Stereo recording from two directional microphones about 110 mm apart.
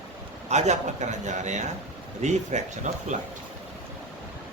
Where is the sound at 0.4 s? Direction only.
90° right.